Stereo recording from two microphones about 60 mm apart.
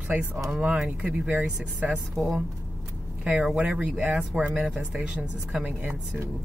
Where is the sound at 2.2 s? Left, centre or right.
Centre.